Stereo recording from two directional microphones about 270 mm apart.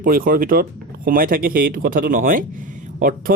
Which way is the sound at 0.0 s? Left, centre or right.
Right.